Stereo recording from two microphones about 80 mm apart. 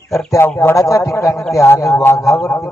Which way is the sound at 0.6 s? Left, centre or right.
Left.